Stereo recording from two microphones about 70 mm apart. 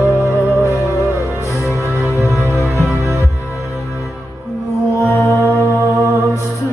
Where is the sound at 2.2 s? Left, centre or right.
Left.